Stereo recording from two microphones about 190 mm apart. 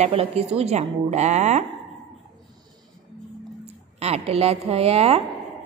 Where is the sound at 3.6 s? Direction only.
35° right (ahead or behind).